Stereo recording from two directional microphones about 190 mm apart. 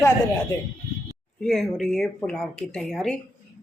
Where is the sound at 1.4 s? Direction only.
Centre (ahead or behind).